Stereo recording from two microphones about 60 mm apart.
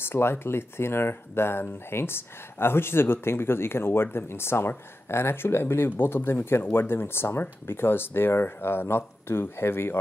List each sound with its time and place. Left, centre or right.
0.0 s speech: left